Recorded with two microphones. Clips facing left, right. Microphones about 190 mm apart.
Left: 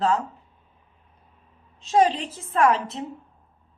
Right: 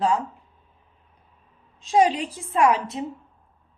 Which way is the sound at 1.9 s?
10° right (ahead or behind).